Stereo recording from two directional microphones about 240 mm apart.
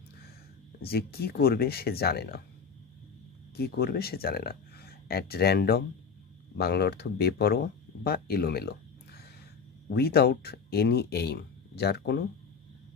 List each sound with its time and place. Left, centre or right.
0.8 s speech: left
3.5 s speech: left
9.8 s speech: left